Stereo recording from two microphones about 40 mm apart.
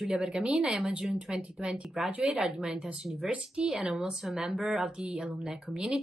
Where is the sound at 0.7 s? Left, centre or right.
Centre.